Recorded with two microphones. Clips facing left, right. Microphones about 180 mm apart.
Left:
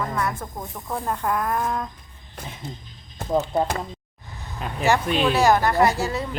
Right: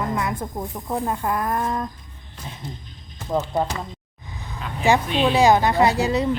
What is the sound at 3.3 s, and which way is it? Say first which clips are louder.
Speech: left 1 dB; 10° left (ahead or behind).